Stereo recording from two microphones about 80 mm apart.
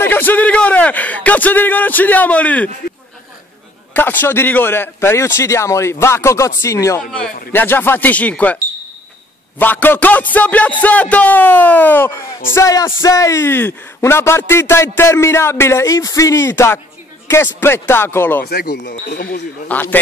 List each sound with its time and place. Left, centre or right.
0.0 s speech: left
3.9 s a man's voice: left
7.1 s a man's voice: centre
7.5 s speech: left
9.6 s a man's voice: left